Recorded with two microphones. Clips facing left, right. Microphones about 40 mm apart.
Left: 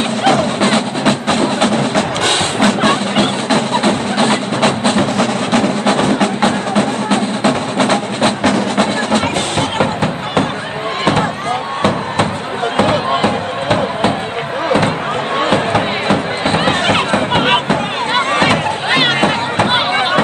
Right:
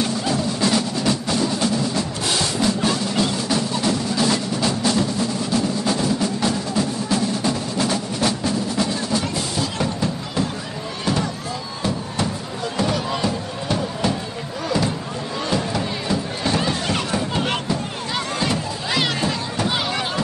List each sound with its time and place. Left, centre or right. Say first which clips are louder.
0.2 s music: left 9 dB; left
12.7 s music: left 9 dB; left
15.5 s music: left 6 dB; left